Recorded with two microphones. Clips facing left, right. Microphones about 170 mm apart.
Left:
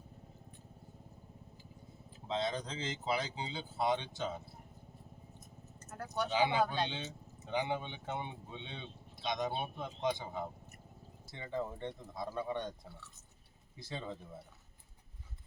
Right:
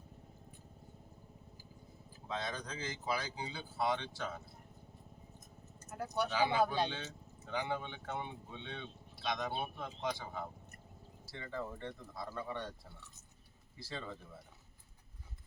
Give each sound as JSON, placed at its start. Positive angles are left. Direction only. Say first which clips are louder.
{"t": 2.1, "sound": "speech", "louder": "left 5 dB", "side_deg": 20}
{"t": 5.9, "sound": "speech", "louder": "right 1 dB", "side_deg": -10}
{"t": 6.3, "sound": "speech", "louder": "left 1 dB", "side_deg": 20}